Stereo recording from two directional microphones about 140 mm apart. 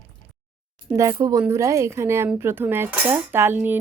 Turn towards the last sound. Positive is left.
turn(degrees=-15)  # may be behind; listen again after turning